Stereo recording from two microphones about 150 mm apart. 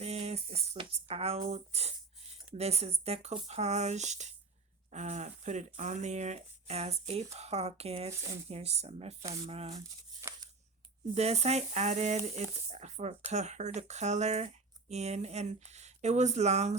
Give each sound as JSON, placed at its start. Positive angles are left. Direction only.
{"t": 0.0, "sound": "a sound", "side_deg": -45}
{"t": 1.5, "sound": "speech", "side_deg": -45}
{"t": 9.7, "sound": "tearing", "side_deg": -25}
{"t": 11.1, "sound": "speech", "side_deg": -45}